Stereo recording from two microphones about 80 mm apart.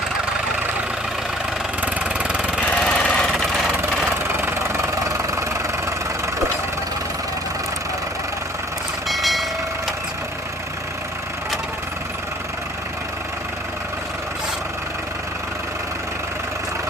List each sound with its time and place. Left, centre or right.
1.8 s engine: centre
2.6 s a sound: centre
3.8 s vehicle: right
9.0 s train: centre